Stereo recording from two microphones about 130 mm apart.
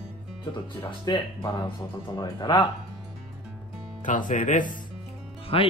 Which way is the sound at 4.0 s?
80° left.